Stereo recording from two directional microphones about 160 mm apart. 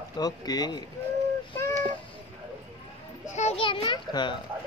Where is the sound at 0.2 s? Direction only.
25° left (ahead or behind).